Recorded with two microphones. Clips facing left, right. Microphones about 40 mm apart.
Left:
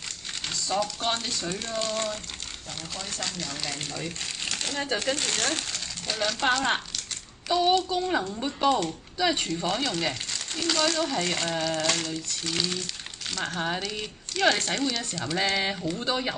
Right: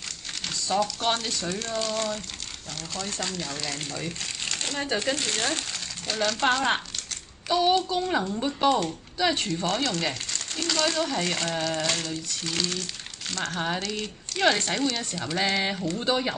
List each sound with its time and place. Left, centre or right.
0.7 s speech: centre
1.5 s speech: centre
3.2 s speech: centre
4.9 s speech: centre
5.4 s speech: centre
13.7 s speech: centre
14.3 s speech: centre